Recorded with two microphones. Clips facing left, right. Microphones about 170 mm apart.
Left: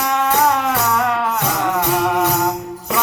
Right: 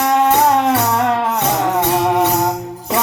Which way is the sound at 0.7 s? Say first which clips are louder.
Right 3 dB; 30° right (ahead or behind).